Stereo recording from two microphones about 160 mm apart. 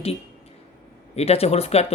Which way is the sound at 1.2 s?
40° left (ahead or behind).